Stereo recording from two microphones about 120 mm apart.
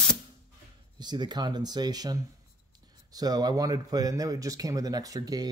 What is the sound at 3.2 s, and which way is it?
Speech, 30° right (ahead or behind).